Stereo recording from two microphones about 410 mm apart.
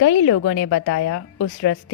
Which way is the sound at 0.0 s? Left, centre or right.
Left.